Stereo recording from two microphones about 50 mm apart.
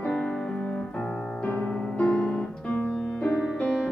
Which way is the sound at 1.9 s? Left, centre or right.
Centre.